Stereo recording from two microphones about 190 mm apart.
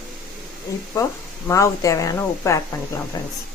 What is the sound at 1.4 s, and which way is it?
A woman's voice, 15° left (ahead or behind).